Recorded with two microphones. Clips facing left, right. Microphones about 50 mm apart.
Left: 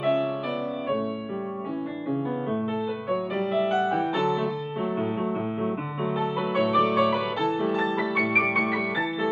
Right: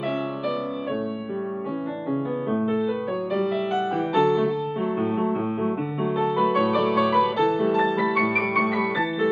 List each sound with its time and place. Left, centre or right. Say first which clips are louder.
3.3 s music: right 2 dB; centre
3.7 s music: right 2 dB; centre